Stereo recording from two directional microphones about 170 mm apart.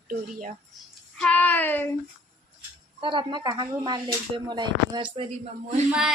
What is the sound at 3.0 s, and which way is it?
Speech, 30° right (ahead or behind).